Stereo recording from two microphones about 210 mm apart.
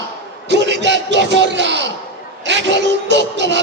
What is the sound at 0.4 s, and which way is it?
A man's voice, 55° right (ahead or behind).